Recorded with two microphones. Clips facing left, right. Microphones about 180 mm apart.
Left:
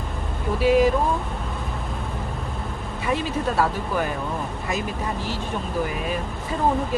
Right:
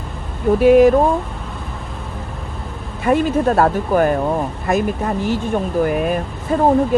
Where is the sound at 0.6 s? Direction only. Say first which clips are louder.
Right 8 dB; 55° right (ahead or behind).